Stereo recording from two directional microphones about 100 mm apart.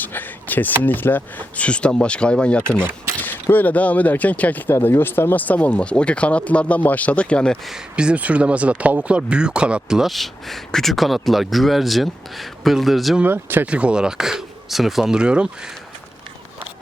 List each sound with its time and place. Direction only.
0.0 s a sound: 20° left (ahead or behind)
0.8 s speech: 20° left (ahead or behind)
7.7 s speech: 10° right (ahead or behind)
13.1 s speech: 20° right (ahead or behind)